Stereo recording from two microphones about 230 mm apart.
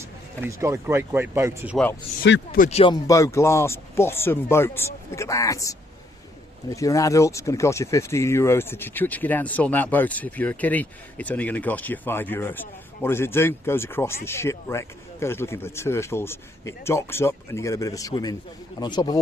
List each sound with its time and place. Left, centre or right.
0.0 s speech: centre
1.7 s speech: centre
2.2 s speech: left
2.6 s speech: left